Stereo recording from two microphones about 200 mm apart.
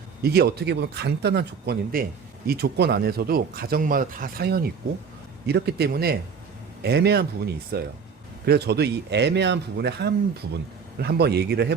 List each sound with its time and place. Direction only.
0.2 s speech: 55° right (ahead or behind)